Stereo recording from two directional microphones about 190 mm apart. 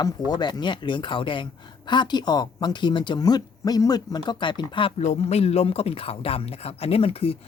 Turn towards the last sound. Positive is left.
turn(degrees=30)  # may be behind; listen again after turning